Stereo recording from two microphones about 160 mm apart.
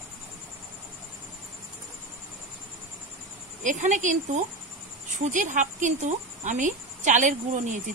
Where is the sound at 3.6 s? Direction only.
50° right (ahead or behind).